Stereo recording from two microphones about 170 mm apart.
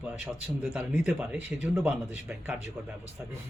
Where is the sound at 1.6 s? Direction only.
10° right (ahead or behind).